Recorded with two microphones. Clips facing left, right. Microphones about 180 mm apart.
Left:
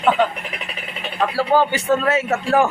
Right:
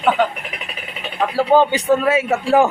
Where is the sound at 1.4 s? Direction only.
15° right (ahead or behind).